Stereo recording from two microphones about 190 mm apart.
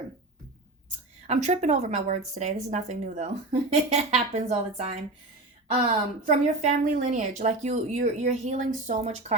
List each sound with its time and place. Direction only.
0.9 s a woman's voice: 40° right (ahead or behind)
6.2 s a woman's voice: 35° right (ahead or behind)